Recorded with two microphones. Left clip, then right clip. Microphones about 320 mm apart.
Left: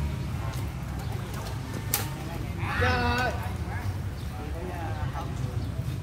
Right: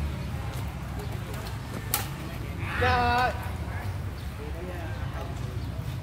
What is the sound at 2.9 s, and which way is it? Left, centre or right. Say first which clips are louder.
Sheep: right 6 dB; centre.